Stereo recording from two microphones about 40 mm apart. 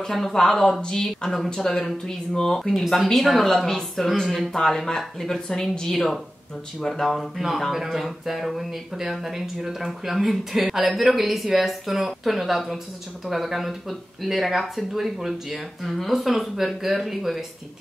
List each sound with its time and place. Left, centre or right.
0.0 s speech: centre
3.1 s speech: centre
4.6 s speech: centre